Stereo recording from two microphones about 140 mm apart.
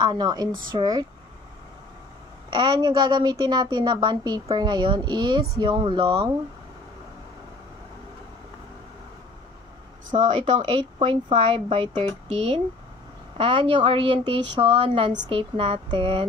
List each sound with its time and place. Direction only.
0.0 s a woman's voice: 30° right (ahead or behind)
2.5 s a woman's voice: 35° right (ahead or behind)
10.0 s a woman's voice: 55° right (ahead or behind)